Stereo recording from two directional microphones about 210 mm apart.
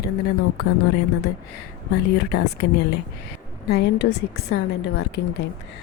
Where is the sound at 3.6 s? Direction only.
50° left (ahead or behind).